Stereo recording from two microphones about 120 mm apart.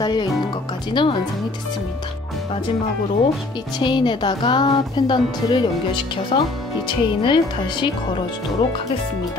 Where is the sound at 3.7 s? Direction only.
40° left (ahead or behind).